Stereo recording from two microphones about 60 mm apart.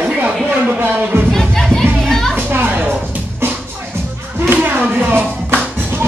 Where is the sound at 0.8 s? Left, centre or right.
Right.